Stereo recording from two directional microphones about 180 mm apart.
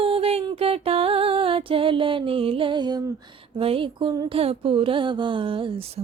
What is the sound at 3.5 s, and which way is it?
Speech, 30° right (ahead or behind).